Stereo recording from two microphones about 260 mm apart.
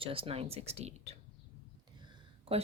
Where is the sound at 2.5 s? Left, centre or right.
Right.